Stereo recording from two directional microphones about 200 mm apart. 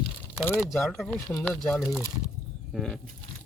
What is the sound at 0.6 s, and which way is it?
Speech, centre (ahead or behind).